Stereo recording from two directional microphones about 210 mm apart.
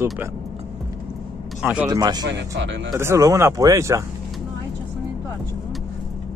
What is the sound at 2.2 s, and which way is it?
Speech, 55° right (ahead or behind).